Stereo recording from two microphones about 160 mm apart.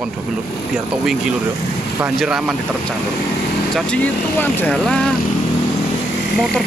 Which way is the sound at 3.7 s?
10° left (ahead or behind).